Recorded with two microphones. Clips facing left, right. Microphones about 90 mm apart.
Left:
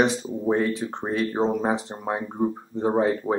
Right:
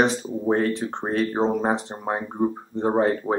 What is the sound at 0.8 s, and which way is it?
Speech, 30° right (ahead or behind).